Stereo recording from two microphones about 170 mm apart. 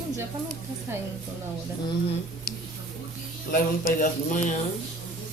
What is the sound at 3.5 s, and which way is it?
Speech, 55° left (ahead or behind).